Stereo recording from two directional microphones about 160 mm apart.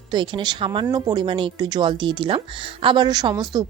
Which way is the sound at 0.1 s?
30° right (ahead or behind).